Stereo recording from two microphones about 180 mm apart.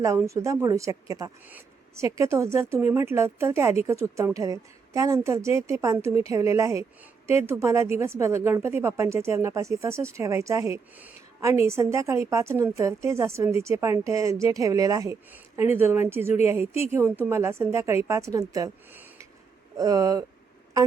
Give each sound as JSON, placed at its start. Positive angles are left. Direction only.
{"t": 0.0, "sound": "a woman's voice", "side_deg": -15}